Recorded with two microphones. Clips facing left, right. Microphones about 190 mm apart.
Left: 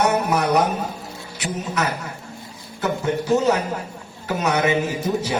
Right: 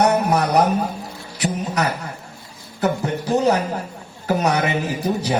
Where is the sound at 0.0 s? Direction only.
35° right (ahead or behind).